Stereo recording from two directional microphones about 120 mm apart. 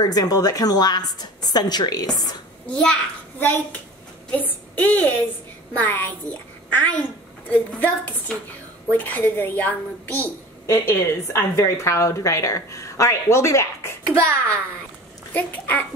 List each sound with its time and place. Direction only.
0.0 s a woman's voice: 30° left (ahead or behind)
2.6 s a child's voice: 10° left (ahead or behind); by 13.9 s 25° left (ahead or behind)
14.0 s a child's voice: 10° left (ahead or behind)